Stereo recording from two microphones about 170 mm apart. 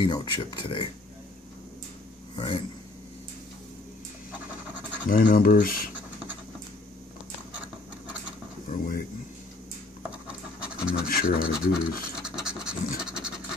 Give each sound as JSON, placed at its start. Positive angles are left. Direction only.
{"t": 0.0, "sound": "speech", "side_deg": 25}
{"t": 2.3, "sound": "speech", "side_deg": 30}
{"t": 5.0, "sound": "speech", "side_deg": 55}
{"t": 8.6, "sound": "speech", "side_deg": 55}
{"t": 10.6, "sound": "scratch", "side_deg": -5}
{"t": 11.1, "sound": "speech", "side_deg": 60}
{"t": 11.6, "sound": "scratch", "side_deg": -5}